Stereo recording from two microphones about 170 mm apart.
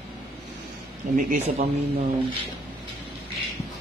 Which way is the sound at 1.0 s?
45° right (ahead or behind).